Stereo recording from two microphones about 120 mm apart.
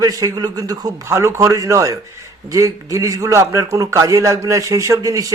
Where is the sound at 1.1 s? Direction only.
25° right (ahead or behind).